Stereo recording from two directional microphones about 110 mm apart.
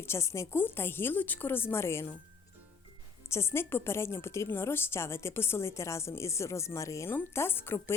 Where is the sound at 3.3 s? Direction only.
25° left (ahead or behind).